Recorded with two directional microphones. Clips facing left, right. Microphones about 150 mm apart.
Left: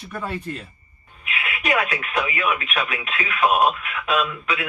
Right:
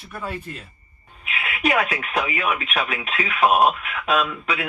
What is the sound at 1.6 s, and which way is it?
A man's voice, 35° right (ahead or behind).